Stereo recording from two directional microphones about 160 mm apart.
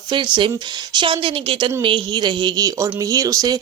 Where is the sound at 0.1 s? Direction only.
30° right (ahead or behind).